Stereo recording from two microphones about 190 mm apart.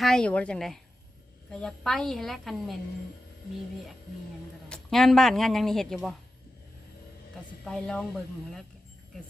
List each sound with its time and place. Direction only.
0.0 s speech: 5° left (ahead or behind)
4.7 s speech: centre (ahead or behind)
7.6 s speech: 5° left (ahead or behind)